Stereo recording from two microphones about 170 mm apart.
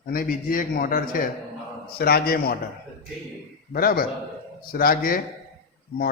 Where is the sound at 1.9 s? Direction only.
65° left (ahead or behind).